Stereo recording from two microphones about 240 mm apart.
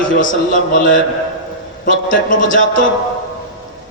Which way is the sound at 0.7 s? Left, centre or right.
Left.